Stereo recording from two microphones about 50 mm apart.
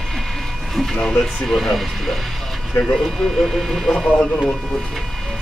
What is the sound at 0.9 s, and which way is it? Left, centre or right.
Speech, centre.